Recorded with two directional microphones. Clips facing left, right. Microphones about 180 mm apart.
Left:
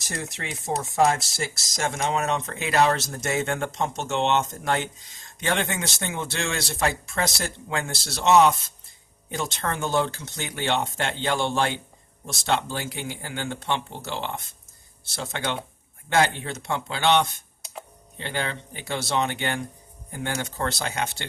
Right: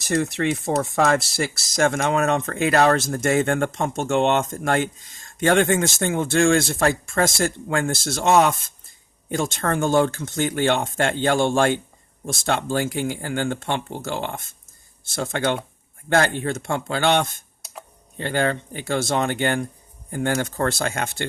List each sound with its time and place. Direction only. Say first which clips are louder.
0.1 s speech: right 12 dB; 65° right (ahead or behind)